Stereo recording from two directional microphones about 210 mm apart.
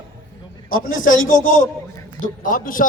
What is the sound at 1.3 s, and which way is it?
A man's voice, 40° left (ahead or behind).